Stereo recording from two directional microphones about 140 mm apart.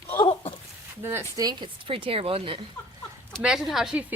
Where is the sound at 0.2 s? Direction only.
40° left (ahead or behind).